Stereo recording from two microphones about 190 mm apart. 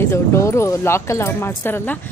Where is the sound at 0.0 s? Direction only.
15° left (ahead or behind).